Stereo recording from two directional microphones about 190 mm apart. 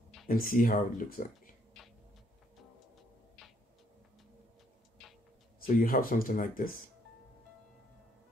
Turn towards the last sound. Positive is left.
turn(degrees=45)  # may be behind; listen again after turning